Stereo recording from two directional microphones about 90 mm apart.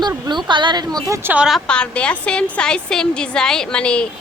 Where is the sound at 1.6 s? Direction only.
10° left (ahead or behind).